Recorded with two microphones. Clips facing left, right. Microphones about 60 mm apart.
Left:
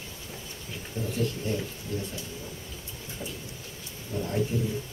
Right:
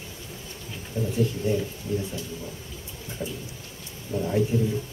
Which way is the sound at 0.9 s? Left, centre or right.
Right.